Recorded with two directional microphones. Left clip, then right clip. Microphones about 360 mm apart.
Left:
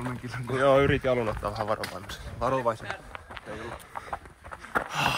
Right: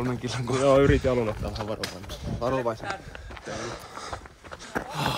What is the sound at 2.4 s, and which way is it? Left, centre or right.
Speech, left.